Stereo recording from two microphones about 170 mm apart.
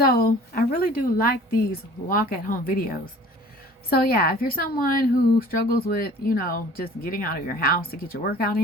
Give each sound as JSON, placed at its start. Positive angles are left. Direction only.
{"t": 0.0, "sound": "speech", "side_deg": 60}